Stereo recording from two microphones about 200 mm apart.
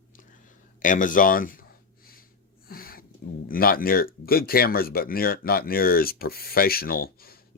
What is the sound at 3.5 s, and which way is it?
Speech, 45° left (ahead or behind).